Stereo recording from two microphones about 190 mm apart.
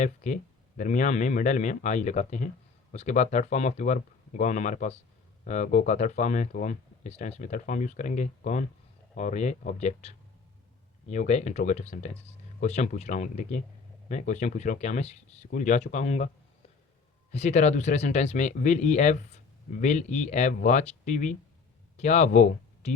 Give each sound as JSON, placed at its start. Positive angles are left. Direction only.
{"t": 0.8, "sound": "speech", "side_deg": 40}
{"t": 17.3, "sound": "speech", "side_deg": 35}